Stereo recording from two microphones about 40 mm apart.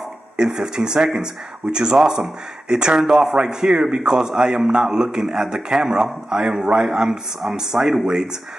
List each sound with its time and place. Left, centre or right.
0.4 s a man's voice: centre